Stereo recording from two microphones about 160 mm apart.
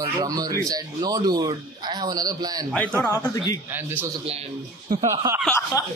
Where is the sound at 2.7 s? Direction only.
15° left (ahead or behind).